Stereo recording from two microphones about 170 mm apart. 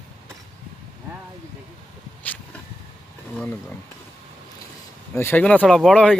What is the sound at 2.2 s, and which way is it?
Vehicle, 10° left (ahead or behind).